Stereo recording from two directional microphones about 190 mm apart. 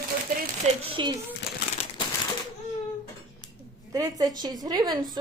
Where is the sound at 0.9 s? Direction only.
25° right (ahead or behind).